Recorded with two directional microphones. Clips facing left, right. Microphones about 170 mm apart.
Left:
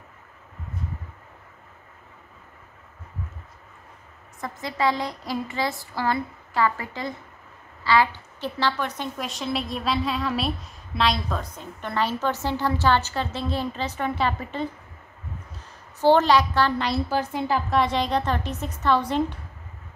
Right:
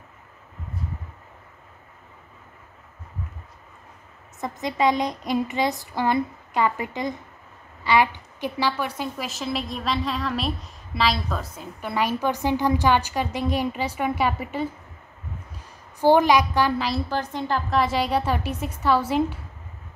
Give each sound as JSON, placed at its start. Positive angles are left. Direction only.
{"t": 4.4, "sound": "a woman's voice", "side_deg": -20}
{"t": 16.0, "sound": "a woman's voice", "side_deg": -10}